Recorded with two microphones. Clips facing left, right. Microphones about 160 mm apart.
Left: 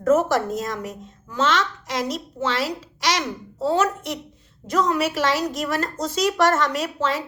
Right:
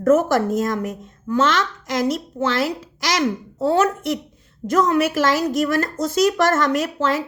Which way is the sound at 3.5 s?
55° right (ahead or behind).